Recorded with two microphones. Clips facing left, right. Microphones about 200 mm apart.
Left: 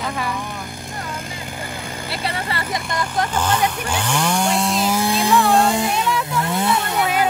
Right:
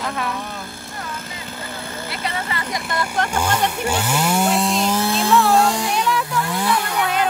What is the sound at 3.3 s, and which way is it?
Speech, 10° right (ahead or behind).